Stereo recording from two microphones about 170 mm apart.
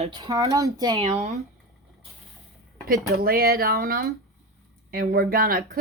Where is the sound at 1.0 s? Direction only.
40° right (ahead or behind).